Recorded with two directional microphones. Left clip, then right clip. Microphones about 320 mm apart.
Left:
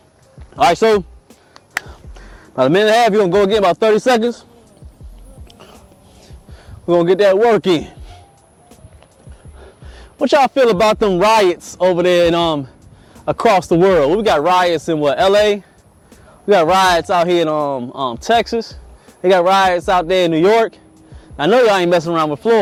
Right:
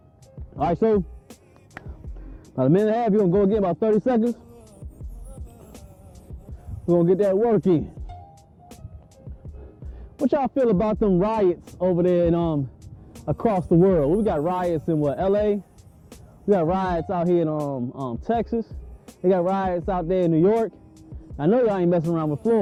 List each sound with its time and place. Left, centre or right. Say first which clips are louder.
0.5 s speech: left 9 dB; centre
6.8 s a man's voice: left 8 dB; centre
9.6 s a man's voice: left 7 dB; centre
17.8 s speech: left 10 dB; left
18.2 s a man's voice: left 10 dB; centre